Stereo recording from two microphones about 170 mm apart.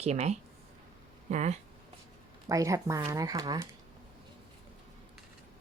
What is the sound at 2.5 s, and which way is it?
Speech, 20° right (ahead or behind).